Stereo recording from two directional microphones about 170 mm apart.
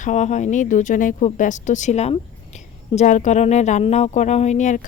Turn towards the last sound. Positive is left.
turn(degrees=45)  # may be behind; listen again after turning